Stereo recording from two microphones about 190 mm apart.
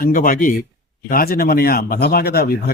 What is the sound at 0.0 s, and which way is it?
A man's voice, 45° left (ahead or behind).